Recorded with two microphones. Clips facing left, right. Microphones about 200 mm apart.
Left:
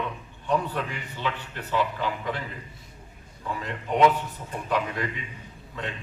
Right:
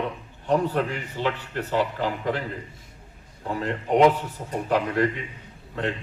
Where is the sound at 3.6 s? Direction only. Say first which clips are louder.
Right 7 dB; 55° right (ahead or behind).